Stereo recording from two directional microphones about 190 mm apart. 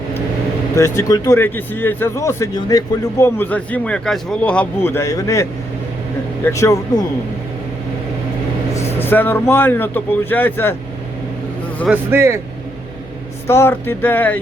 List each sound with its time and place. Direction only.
0.8 s speech: 15° left (ahead or behind)
8.7 s speech: 15° left (ahead or behind)
11.9 s speech: 15° right (ahead or behind)
13.5 s speech: 10° left (ahead or behind)